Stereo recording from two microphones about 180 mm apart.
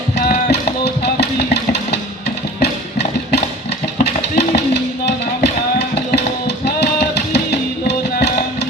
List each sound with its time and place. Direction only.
1.0 s music: 60° left (ahead or behind)
2.6 s music: 65° left (ahead or behind)
4.0 s a sound: 70° left (ahead or behind)
6.7 s music: 70° left (ahead or behind)